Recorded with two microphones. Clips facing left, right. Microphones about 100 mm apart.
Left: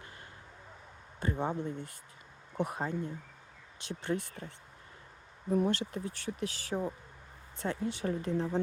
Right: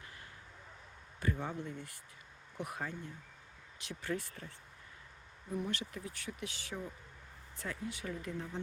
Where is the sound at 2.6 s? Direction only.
25° left (ahead or behind).